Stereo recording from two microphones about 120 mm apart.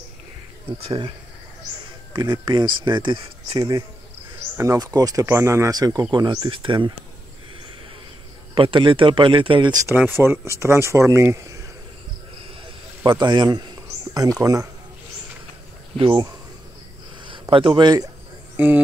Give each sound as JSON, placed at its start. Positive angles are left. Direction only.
{"t": 0.8, "sound": "speech", "side_deg": -45}
{"t": 2.1, "sound": "speech", "side_deg": -35}
{"t": 8.5, "sound": "speech", "side_deg": -45}
{"t": 9.9, "sound": "speech", "side_deg": -15}
{"t": 13.0, "sound": "a sound", "side_deg": -40}
{"t": 14.4, "sound": "speech", "side_deg": -30}
{"t": 16.0, "sound": "speech", "side_deg": -45}
{"t": 18.6, "sound": "speech", "side_deg": -15}